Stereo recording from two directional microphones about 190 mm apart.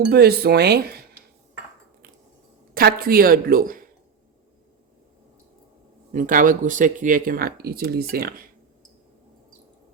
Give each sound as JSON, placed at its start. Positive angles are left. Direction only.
{"t": 0.1, "sound": "speech", "side_deg": -55}
{"t": 2.7, "sound": "speech", "side_deg": -50}
{"t": 6.1, "sound": "speech", "side_deg": -45}